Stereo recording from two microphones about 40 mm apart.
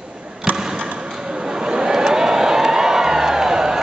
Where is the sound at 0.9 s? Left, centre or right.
Centre.